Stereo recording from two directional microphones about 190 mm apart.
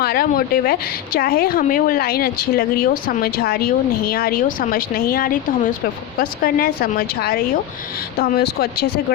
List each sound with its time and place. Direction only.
0.0 s a woman's voice: 50° left (ahead or behind)